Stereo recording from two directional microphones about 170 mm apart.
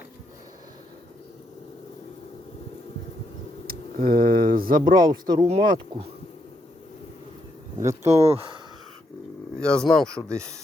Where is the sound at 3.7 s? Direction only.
60° right (ahead or behind).